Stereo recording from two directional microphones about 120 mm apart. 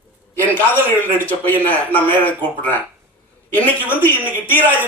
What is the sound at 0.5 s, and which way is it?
A man's voice, 15° left (ahead or behind).